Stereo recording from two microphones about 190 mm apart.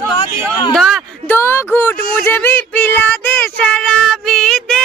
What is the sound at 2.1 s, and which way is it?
Child singing, 10° left (ahead or behind).